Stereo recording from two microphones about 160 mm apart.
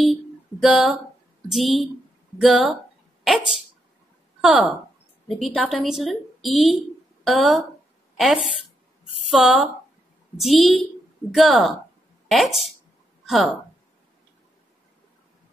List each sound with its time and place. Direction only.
0.0 s guitar: centre (ahead or behind)
1.5 s a woman's voice: centre (ahead or behind)
4.4 s a woman's voice: centre (ahead or behind)